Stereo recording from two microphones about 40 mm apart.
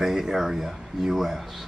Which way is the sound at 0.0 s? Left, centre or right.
Centre.